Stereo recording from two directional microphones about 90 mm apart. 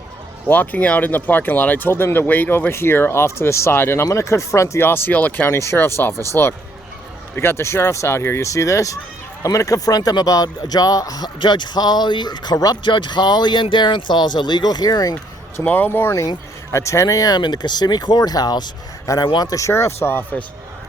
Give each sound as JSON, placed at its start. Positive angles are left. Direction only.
{"t": 0.4, "sound": "speech", "side_deg": 20}
{"t": 5.5, "sound": "speech", "side_deg": 30}
{"t": 11.3, "sound": "speech", "side_deg": 60}
{"t": 12.8, "sound": "speech", "side_deg": 60}
{"t": 15.5, "sound": "speech", "side_deg": 20}
{"t": 19.0, "sound": "a man's voice", "side_deg": 40}